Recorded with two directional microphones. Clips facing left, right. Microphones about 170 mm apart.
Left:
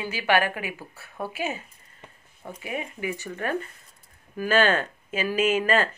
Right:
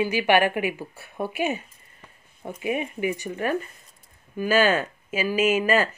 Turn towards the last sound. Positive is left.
turn(degrees=-10)  # may be behind; listen again after turning